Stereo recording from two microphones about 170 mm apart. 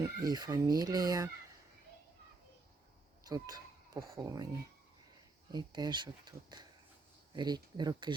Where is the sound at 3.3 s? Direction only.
20° right (ahead or behind).